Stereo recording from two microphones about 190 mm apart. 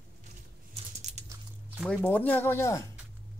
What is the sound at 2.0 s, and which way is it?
Speech, 10° left (ahead or behind).